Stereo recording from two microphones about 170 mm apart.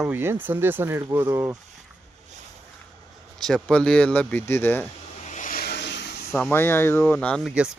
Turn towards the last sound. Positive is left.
turn(degrees=-5)  # may be behind; listen again after turning